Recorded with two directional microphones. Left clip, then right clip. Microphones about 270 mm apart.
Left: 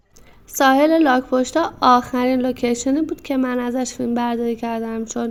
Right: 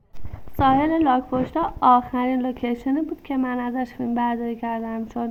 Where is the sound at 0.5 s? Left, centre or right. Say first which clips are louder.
Left 5 dB; left.